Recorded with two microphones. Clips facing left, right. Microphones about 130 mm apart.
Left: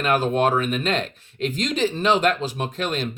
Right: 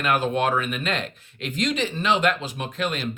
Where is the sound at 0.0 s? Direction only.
40° left (ahead or behind).